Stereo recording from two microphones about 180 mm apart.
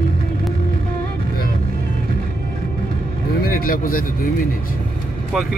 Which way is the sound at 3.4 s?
55° left (ahead or behind).